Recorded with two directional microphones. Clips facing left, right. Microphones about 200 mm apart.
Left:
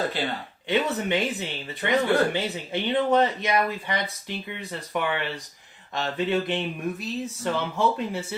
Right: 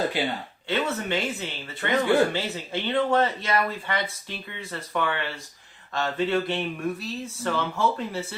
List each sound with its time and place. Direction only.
0.7 s speech: 15° left (ahead or behind)